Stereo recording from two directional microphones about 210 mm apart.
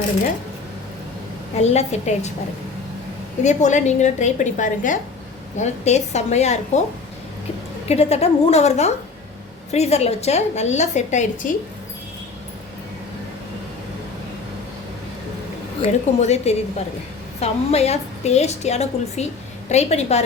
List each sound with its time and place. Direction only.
1.6 s a woman's voice: 30° left (ahead or behind)
3.4 s a woman's voice: 35° left (ahead or behind)
7.9 s a woman's voice: 30° left (ahead or behind)
15.8 s a woman's voice: 30° left (ahead or behind)